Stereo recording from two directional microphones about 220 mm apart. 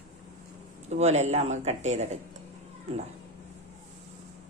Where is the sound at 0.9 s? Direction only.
30° right (ahead or behind).